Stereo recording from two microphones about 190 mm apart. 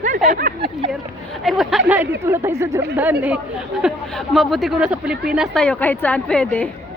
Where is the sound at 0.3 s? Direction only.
50° right (ahead or behind).